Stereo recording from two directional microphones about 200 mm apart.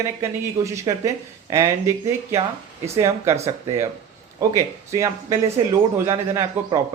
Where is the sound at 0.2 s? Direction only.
15° right (ahead or behind).